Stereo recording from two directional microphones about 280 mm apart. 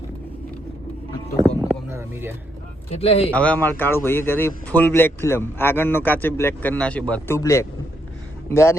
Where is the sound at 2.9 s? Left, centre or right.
Left.